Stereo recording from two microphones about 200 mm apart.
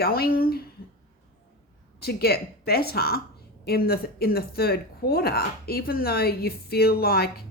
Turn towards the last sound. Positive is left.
turn(degrees=50)  # may be behind; listen again after turning